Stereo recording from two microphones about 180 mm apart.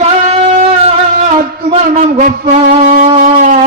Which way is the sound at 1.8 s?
45° right (ahead or behind).